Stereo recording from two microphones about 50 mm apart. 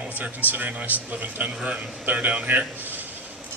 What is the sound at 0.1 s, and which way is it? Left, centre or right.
A man's voice, right.